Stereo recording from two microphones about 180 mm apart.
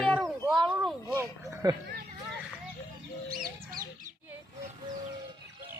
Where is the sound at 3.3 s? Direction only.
50° right (ahead or behind).